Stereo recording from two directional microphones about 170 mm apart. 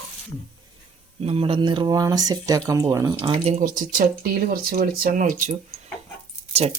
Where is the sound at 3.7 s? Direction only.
55° right (ahead or behind).